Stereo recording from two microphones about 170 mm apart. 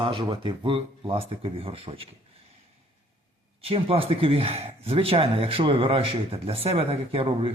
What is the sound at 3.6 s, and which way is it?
Speech, 35° right (ahead or behind).